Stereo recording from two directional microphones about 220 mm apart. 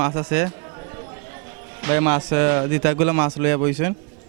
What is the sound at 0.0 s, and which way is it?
Speech, 20° right (ahead or behind).